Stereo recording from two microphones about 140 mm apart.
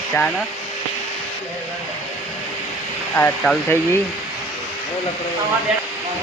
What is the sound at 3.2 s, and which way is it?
Speech, 25° left (ahead or behind).